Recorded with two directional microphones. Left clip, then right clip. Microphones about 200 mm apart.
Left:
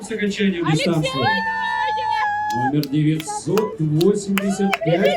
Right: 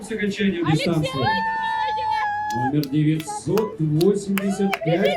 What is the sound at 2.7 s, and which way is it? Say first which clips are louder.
Speech: left 1 dB; 50° left (ahead or behind).